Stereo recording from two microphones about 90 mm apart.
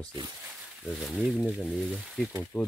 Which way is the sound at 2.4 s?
15° left (ahead or behind).